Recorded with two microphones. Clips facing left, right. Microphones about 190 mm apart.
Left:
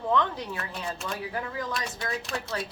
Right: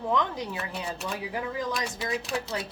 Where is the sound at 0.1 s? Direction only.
15° right (ahead or behind).